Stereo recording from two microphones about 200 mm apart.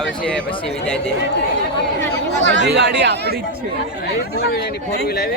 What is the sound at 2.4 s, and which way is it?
Speech, 60° right (ahead or behind).